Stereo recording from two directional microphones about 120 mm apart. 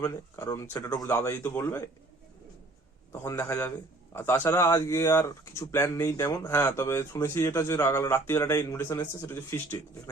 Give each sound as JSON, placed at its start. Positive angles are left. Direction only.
{"t": 0.0, "sound": "speech", "side_deg": 25}
{"t": 3.2, "sound": "speech", "side_deg": 20}